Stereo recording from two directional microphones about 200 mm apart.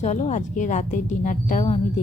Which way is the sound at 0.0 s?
35° left (ahead or behind).